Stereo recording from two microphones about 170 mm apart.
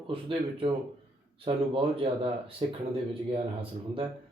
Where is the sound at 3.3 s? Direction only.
30° right (ahead or behind).